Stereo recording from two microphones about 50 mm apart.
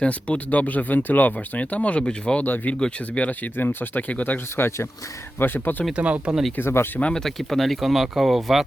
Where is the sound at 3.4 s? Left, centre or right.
Left.